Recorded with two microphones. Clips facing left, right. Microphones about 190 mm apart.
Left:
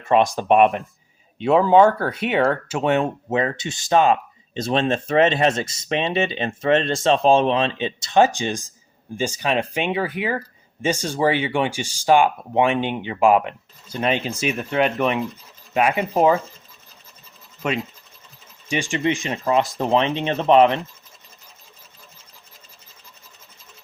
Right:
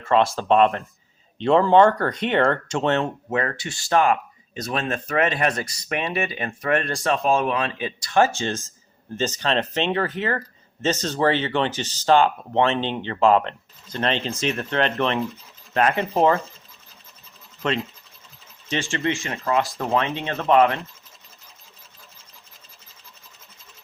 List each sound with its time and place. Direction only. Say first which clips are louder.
0.0 s speech: left 2 dB; 15° left (ahead or behind)
3.2 s speech: left 3 dB; 20° left (ahead or behind)
17.6 s speech: even; 10° left (ahead or behind)